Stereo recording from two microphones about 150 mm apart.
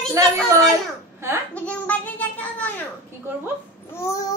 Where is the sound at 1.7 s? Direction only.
10° left (ahead or behind).